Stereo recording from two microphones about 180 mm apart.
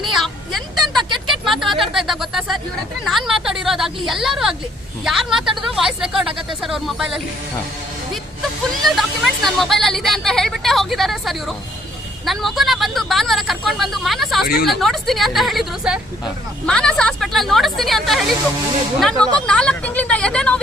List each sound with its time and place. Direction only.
0.2 s a sound: centre (ahead or behind)
1.8 s speech: centre (ahead or behind)
8.8 s speech: centre (ahead or behind)
14.4 s speech: 60° left (ahead or behind)
14.7 s speech: centre (ahead or behind)